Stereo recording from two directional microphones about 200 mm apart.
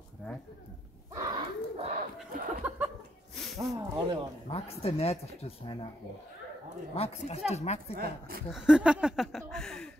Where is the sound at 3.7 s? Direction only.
15° right (ahead or behind).